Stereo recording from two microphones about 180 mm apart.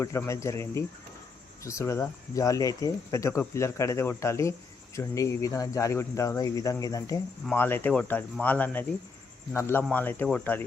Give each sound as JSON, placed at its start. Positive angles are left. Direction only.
{"t": 0.0, "sound": "speech", "side_deg": 15}